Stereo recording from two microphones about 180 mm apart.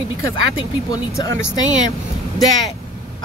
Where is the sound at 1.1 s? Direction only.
15° left (ahead or behind).